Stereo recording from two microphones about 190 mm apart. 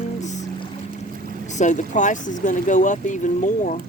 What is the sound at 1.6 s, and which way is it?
Speech, 40° left (ahead or behind).